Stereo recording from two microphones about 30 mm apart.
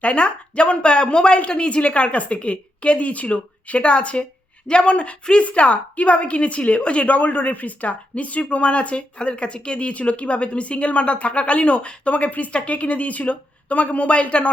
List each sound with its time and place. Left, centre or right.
0.0 s a woman's voice: left
12.1 s speech: left
12.5 s a woman's voice: left
12.7 s a woman's voice: left